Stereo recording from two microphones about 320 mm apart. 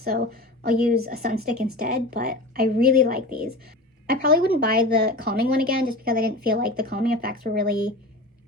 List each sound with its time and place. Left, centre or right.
0.0 s a woman's voice: right